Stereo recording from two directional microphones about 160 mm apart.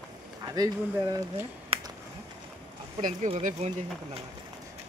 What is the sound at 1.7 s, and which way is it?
Finger snapping, 35° right (ahead or behind).